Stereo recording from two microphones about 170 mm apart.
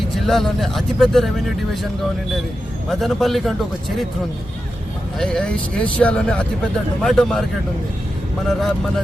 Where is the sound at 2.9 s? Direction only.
Centre (ahead or behind).